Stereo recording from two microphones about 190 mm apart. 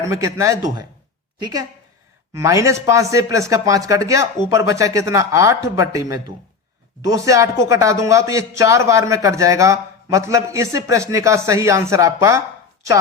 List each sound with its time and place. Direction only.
0.0 s a man's voice: 15° right (ahead or behind)